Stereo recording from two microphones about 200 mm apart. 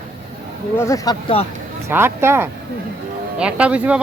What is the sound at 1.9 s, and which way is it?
A man's voice, 10° right (ahead or behind).